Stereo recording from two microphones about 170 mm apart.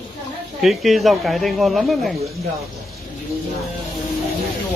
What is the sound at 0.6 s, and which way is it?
Speech, centre (ahead or behind).